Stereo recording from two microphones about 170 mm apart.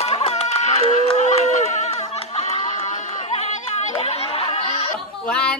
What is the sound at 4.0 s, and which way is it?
Snicker, 35° left (ahead or behind).